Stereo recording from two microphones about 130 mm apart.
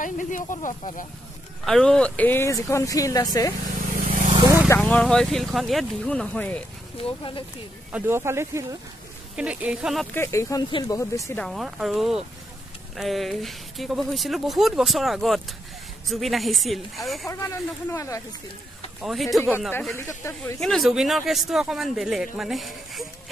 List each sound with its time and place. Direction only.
0.0 s speech: 85° left
1.6 s speech: 5° left (ahead or behind); by 3.3 s 25° left (ahead or behind)
3.9 s vehicle: 90° right
4.6 s speech: 10° left (ahead or behind)
7.0 s speech: 45° left (ahead or behind)
7.9 s speech: 20° right (ahead or behind)
9.4 s speech: 10° right (ahead or behind)
10.1 s speech: 20° left (ahead or behind)
11.3 s speech: centre (ahead or behind)
17.3 s speech: 25° left (ahead or behind)
18.9 s speech: centre (ahead or behind)
19.9 s speech: 20° left (ahead or behind)
20.5 s speech: 5° left (ahead or behind)